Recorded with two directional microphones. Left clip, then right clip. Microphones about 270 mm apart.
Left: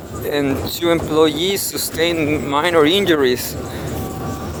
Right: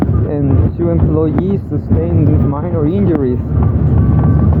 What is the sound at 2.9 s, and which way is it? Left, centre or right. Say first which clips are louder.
Speech: left 1 dB; left.